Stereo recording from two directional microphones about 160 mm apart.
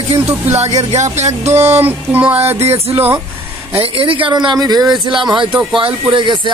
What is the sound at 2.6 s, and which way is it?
Speech, 40° right (ahead or behind).